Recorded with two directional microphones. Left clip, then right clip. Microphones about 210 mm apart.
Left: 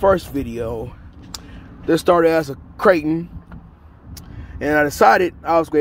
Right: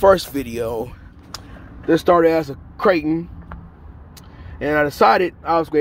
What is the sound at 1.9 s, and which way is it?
Speech, 5° left (ahead or behind).